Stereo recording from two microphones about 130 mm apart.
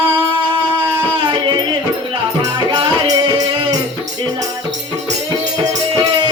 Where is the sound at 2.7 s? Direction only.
30° right (ahead or behind).